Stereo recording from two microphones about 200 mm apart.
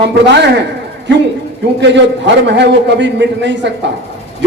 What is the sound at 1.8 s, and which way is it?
A man's voice, 65° right (ahead or behind).